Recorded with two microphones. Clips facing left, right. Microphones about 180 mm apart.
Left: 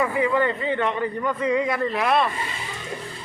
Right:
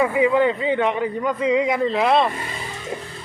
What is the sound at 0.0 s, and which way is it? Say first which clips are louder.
A man's voice: right 4 dB; 15° right (ahead or behind).